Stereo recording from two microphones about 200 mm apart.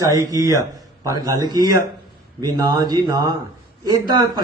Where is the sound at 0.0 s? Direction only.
15° right (ahead or behind).